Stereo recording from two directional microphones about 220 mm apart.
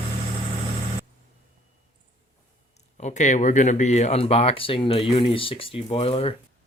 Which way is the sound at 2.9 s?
30° left (ahead or behind).